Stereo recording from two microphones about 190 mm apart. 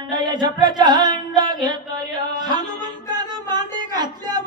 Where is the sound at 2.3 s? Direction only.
20° right (ahead or behind).